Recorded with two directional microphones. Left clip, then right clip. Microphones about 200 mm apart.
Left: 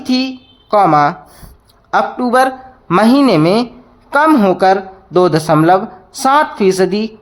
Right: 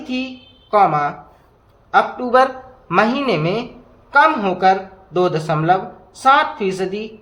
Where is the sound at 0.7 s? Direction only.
50° left (ahead or behind).